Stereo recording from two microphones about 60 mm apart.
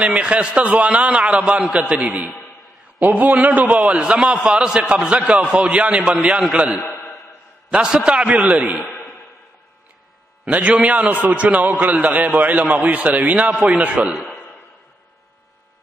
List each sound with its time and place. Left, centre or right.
0.0 s a man's voice: right
3.9 s a man's voice: centre
6.9 s a sound: left
7.7 s a man's voice: centre
10.4 s a man's voice: right
14.1 s a man's voice: centre